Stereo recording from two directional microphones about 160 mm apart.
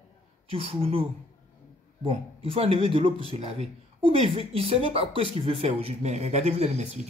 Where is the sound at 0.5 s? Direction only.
35° right (ahead or behind).